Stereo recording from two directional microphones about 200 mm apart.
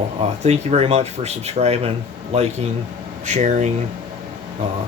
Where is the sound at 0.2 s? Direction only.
30° right (ahead or behind).